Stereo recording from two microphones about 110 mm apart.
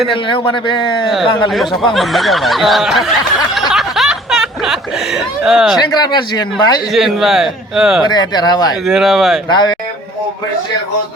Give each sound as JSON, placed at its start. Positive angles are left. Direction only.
{"t": 0.1, "sound": "speech", "side_deg": 50}
{"t": 1.5, "sound": "speech", "side_deg": 0}
{"t": 3.5, "sound": "snicker", "side_deg": 0}
{"t": 5.9, "sound": "speech", "side_deg": 40}
{"t": 6.9, "sound": "speech", "side_deg": -5}
{"t": 8.0, "sound": "speech", "side_deg": 40}
{"t": 8.9, "sound": "speech", "side_deg": -5}
{"t": 9.5, "sound": "speech", "side_deg": 40}